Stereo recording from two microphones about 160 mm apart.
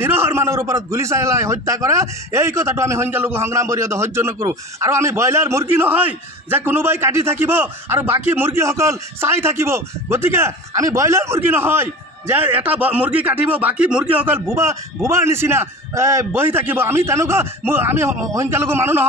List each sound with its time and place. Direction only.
0.0 s a man's voice: 15° right (ahead or behind)